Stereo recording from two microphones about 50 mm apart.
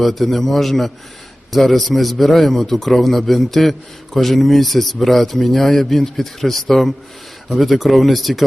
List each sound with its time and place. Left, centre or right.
0.0 s a man's voice: centre